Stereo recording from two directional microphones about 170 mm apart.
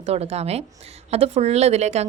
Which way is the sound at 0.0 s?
40° right (ahead or behind).